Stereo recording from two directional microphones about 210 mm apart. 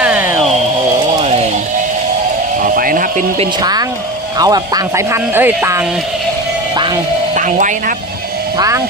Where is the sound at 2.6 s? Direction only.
40° right (ahead or behind).